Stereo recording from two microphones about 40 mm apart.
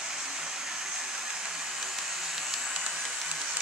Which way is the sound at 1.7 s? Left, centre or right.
Centre.